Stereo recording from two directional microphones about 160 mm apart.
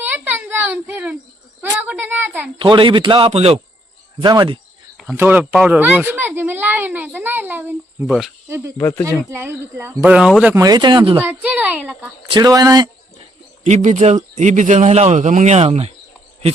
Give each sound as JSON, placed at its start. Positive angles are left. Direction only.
{"t": 0.0, "sound": "a sound", "side_deg": -10}
{"t": 1.7, "sound": "a woman's voice", "side_deg": -10}
{"t": 2.6, "sound": "a man's voice", "side_deg": -30}
{"t": 4.9, "sound": "a child's voice", "side_deg": -10}
{"t": 8.0, "sound": "speech", "side_deg": 0}
{"t": 8.4, "sound": "a child's voice", "side_deg": -15}
{"t": 8.8, "sound": "speech", "side_deg": 10}
{"t": 9.3, "sound": "a child's voice", "side_deg": -15}
{"t": 10.5, "sound": "speech", "side_deg": -20}
{"t": 11.2, "sound": "a child's voice", "side_deg": -10}
{"t": 12.3, "sound": "speech", "side_deg": -25}
{"t": 13.7, "sound": "speech", "side_deg": -50}